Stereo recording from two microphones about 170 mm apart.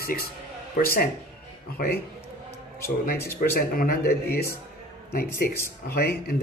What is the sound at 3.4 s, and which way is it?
Speech, 60° left (ahead or behind).